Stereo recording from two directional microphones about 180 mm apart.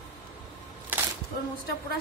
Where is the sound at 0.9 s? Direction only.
10° right (ahead or behind).